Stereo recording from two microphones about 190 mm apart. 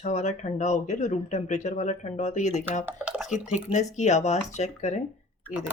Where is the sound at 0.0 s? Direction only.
40° left (ahead or behind).